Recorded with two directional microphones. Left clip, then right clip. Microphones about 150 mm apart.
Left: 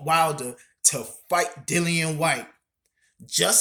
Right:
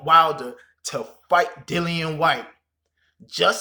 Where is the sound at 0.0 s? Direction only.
20° left (ahead or behind).